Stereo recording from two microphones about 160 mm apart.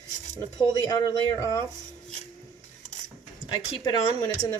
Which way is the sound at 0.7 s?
25° left (ahead or behind).